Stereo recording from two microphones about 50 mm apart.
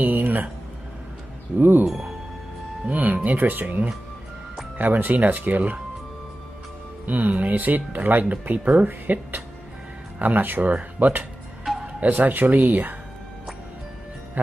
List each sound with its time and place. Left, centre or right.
0.0 s a sound: right
1.6 s speech: right
1.9 s speech: centre
2.9 s speech: right
7.1 s speech: right